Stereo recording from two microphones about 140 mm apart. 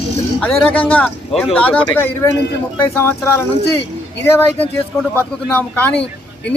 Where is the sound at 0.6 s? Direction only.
5° left (ahead or behind).